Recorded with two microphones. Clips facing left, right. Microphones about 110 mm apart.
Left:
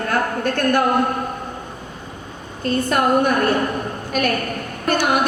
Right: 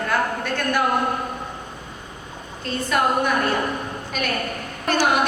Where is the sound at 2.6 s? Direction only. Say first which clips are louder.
Left 3 dB; 50° left (ahead or behind).